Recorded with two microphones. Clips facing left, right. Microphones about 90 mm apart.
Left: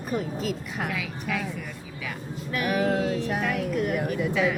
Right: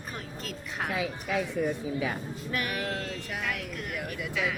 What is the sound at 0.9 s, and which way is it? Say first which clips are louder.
A woman's voice: right 1 dB; 30° right (ahead or behind).